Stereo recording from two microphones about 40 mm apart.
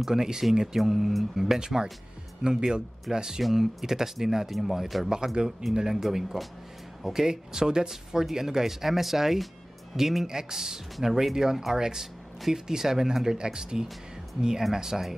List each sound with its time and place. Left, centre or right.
0.0 s speech: centre
5.1 s speech: centre